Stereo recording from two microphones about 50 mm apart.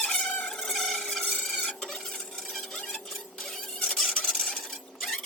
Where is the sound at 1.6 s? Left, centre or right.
Centre.